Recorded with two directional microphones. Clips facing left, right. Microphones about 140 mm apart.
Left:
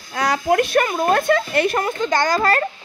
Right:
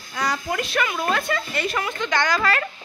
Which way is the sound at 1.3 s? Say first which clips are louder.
Left 8 dB; 55° left (ahead or behind).